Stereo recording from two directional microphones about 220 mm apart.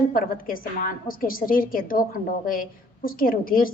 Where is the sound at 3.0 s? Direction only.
40° left (ahead or behind).